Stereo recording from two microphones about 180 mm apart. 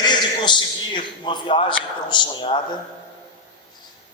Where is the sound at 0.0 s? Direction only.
25° left (ahead or behind).